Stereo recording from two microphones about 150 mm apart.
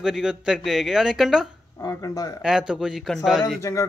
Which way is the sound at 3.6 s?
20° left (ahead or behind).